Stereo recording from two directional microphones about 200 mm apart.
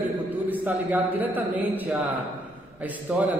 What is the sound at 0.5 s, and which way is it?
A man's voice, 10° right (ahead or behind).